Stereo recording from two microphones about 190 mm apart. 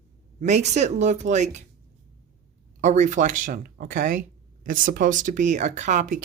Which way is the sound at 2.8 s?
40° right (ahead or behind).